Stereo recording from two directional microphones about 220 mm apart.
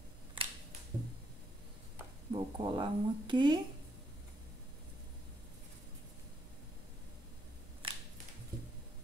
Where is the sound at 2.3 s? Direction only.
20° right (ahead or behind).